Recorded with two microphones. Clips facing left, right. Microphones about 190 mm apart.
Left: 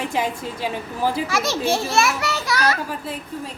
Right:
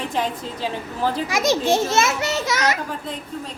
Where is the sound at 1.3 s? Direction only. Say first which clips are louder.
Right 3 dB; 15° right (ahead or behind).